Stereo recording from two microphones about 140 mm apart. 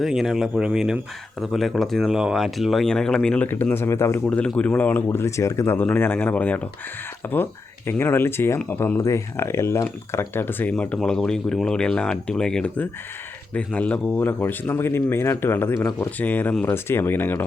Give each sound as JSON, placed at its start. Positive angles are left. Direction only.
{"t": 0.0, "sound": "speech", "side_deg": 0}
{"t": 7.9, "sound": "speech", "side_deg": 15}